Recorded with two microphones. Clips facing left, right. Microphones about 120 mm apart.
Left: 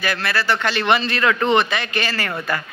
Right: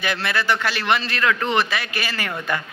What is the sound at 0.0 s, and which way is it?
Speech, 20° right (ahead or behind).